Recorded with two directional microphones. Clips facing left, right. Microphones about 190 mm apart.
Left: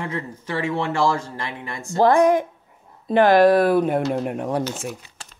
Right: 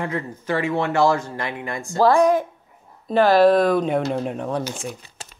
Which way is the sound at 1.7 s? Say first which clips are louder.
Even; 25° left (ahead or behind).